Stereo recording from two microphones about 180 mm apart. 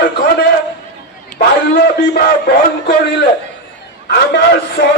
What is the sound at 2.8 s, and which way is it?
Speech, 70° left (ahead or behind).